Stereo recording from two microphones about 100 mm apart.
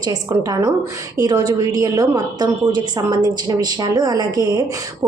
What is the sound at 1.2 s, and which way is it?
A woman's voice, 45° right (ahead or behind).